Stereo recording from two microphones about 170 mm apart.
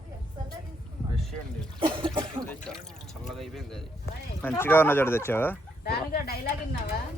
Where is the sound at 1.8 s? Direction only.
30° right (ahead or behind).